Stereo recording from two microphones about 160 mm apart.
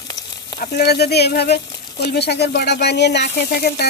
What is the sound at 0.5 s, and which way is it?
Speech, 85° left.